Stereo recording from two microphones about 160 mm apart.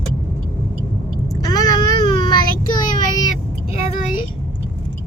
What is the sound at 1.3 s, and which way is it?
Child singing, 25° left (ahead or behind).